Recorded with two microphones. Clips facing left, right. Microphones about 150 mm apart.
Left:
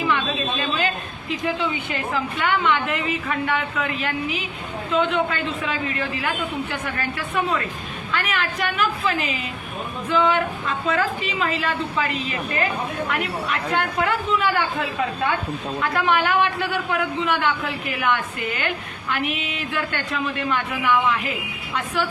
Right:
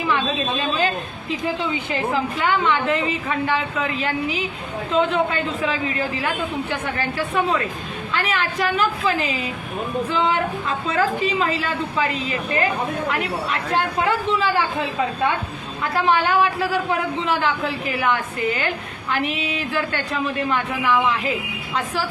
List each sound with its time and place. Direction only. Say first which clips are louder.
1.9 s a woman's voice: right 3 dB; 30° right (ahead or behind)